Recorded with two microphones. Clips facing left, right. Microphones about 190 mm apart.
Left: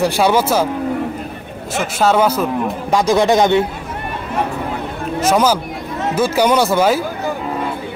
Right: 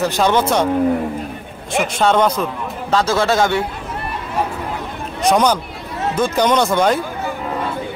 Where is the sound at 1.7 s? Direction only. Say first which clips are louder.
Even; 5° left (ahead or behind); by 3.6 s 20° left (ahead or behind).